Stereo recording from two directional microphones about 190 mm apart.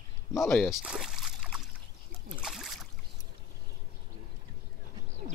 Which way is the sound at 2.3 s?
Centre (ahead or behind).